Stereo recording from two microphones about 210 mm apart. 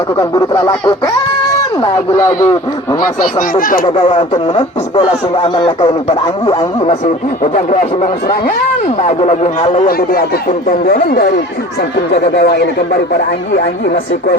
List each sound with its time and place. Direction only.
0.2 s speech: 15° left (ahead or behind)
1.8 s speech: 15° left (ahead or behind)
3.5 s speech: 40° left (ahead or behind)
3.9 s speech: 25° left (ahead or behind); by 12.6 s 50° left (ahead or behind)